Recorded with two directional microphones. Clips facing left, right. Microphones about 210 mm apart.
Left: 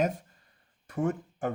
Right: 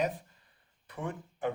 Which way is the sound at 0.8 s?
45° left (ahead or behind).